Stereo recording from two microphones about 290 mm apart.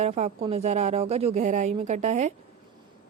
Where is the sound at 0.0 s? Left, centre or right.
Right.